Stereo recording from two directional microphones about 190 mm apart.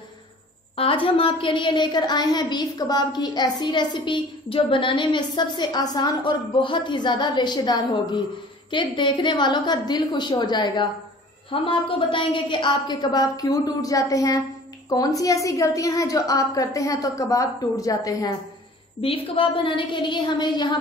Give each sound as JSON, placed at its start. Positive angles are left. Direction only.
{"t": 0.7, "sound": "a woman's voice", "side_deg": 30}
{"t": 18.9, "sound": "a woman's voice", "side_deg": 30}